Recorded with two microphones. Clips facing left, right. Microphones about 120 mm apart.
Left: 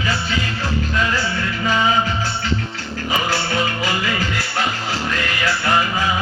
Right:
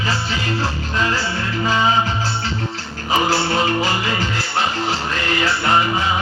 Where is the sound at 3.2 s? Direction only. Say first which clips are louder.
Right 3 dB; 30° right (ahead or behind).